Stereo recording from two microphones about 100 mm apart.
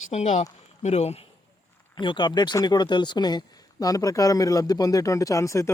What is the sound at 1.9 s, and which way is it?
Speech, 50° left (ahead or behind).